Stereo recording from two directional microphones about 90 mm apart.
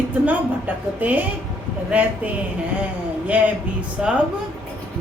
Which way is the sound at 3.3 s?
15° right (ahead or behind).